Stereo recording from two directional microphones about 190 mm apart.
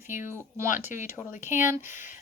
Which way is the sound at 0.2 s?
15° right (ahead or behind).